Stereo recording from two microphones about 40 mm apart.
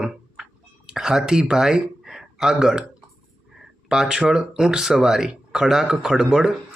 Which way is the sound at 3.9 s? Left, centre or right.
Centre.